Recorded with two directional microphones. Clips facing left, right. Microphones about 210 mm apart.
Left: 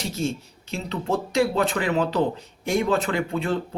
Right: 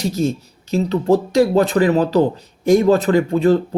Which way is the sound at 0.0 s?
40° right (ahead or behind).